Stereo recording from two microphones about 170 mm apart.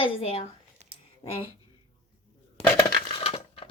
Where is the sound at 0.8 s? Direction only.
40° right (ahead or behind).